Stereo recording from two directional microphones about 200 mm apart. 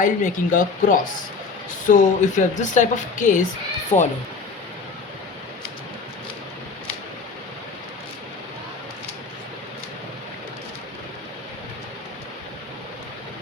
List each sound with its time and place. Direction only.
0.0 s a woman's voice: 40° left (ahead or behind)